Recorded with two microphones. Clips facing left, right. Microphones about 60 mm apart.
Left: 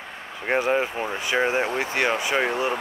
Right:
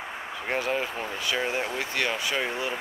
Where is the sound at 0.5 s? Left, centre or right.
Left.